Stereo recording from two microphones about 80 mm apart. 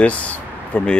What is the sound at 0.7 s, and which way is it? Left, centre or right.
Speech, centre.